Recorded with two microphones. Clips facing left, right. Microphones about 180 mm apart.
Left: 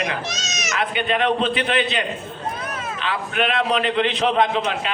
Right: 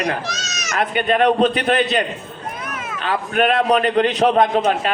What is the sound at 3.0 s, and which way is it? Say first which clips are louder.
A man's voice: right 5 dB; 45° right (ahead or behind).